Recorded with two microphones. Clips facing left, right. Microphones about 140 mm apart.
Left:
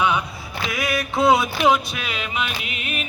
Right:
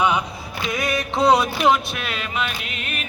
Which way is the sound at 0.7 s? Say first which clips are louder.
Right 2 dB; centre (ahead or behind).